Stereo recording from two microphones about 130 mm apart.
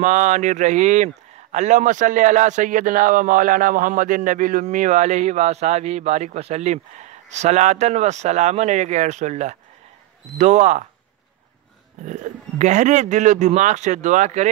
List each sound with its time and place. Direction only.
0.0 s speech: 70° right (ahead or behind)
12.1 s speech: 65° right (ahead or behind)